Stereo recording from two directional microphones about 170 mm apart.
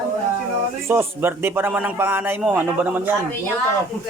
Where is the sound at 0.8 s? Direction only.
15° right (ahead or behind).